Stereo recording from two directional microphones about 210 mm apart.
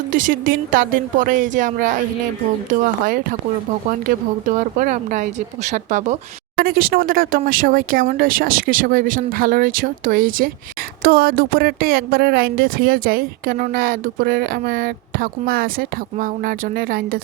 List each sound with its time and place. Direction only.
0.1 s speech: 40° right (ahead or behind)
4.8 s speech: 40° right (ahead or behind)